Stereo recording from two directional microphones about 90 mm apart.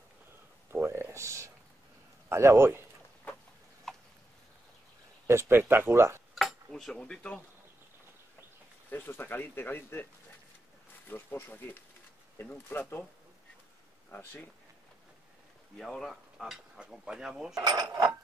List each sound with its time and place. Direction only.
0.7 s a sound: 30° right (ahead or behind)
2.2 s a man's voice: 30° right (ahead or behind)
3.9 s a sound: 5° left (ahead or behind)
5.2 s speech: 30° right (ahead or behind)
6.3 s speech: centre (ahead or behind)
8.9 s speech: 25° left (ahead or behind)
11.1 s speech: 25° left (ahead or behind)
14.1 s speech: 20° left (ahead or behind)
15.8 s speech: 5° left (ahead or behind)
17.6 s speech: 50° right (ahead or behind)